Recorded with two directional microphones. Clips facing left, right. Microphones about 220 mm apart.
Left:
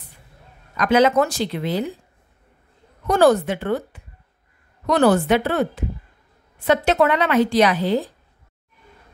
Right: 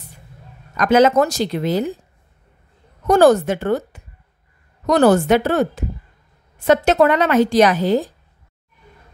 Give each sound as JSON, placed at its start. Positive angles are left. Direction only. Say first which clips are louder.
{"t": 0.7, "sound": "a woman's voice", "louder": "right 3 dB", "side_deg": -45}
{"t": 3.1, "sound": "a woman's voice", "louder": "right 3 dB", "side_deg": -45}